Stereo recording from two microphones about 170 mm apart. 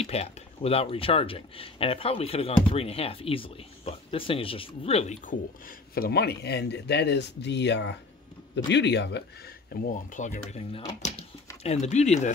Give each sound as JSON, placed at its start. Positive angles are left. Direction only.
{"t": 0.0, "sound": "speech", "side_deg": 35}
{"t": 9.7, "sound": "speech", "side_deg": 55}